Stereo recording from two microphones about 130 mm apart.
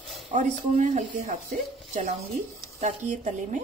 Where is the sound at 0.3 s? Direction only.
60° right (ahead or behind).